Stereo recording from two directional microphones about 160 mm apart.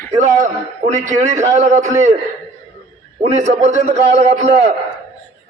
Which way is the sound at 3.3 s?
45° right (ahead or behind).